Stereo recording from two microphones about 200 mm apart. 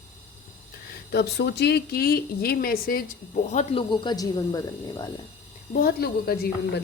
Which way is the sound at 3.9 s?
20° left (ahead or behind).